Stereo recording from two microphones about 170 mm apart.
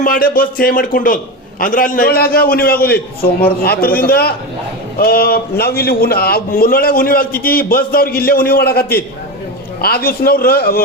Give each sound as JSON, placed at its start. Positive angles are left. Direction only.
{"t": 0.0, "sound": "a man's voice", "side_deg": 55}